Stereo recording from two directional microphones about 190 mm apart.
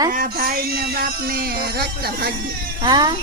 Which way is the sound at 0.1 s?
45° right (ahead or behind).